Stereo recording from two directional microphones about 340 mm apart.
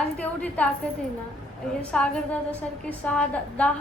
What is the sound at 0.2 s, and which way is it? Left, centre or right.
Speech, centre.